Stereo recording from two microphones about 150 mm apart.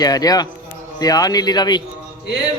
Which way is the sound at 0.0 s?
25° left (ahead or behind).